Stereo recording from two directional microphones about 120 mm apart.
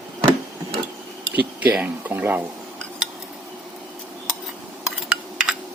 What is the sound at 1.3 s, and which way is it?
Speech, 15° right (ahead or behind).